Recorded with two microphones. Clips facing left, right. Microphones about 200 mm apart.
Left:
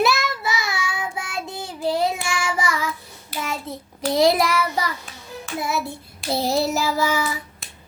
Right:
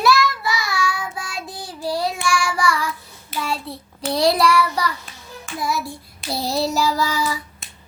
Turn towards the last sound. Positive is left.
turn(degrees=20)  # may be behind; listen again after turning